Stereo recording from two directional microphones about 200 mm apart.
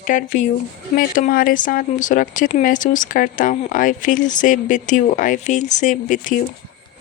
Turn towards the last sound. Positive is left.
turn(degrees=40)  # may be behind; listen again after turning